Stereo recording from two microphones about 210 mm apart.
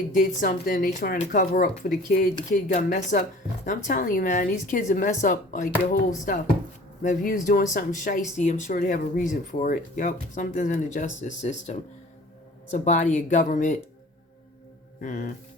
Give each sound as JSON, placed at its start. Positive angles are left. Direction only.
{"t": 0.1, "sound": "speech", "side_deg": 40}
{"t": 15.0, "sound": "speech", "side_deg": 40}